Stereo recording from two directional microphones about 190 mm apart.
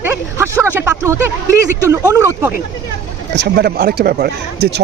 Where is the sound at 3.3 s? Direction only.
55° right (ahead or behind).